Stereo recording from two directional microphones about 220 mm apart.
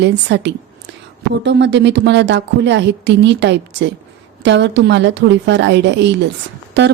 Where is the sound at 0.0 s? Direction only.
50° right (ahead or behind).